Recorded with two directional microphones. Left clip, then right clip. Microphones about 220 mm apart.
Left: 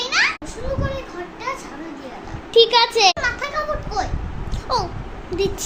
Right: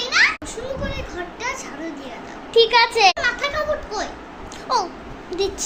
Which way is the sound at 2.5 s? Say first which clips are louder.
Left 1 dB; 20° left (ahead or behind).